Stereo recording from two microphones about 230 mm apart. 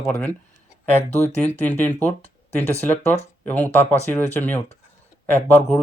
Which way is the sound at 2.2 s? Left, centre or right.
Left.